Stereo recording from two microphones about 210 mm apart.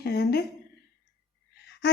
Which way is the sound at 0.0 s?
50° left (ahead or behind).